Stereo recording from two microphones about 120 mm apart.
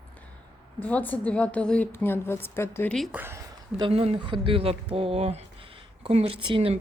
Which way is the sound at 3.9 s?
55° right (ahead or behind).